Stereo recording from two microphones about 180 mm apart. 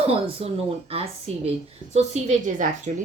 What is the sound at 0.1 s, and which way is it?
A woman's voice, 35° right (ahead or behind).